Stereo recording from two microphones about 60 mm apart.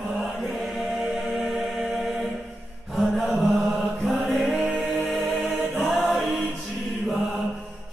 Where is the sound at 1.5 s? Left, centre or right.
Centre.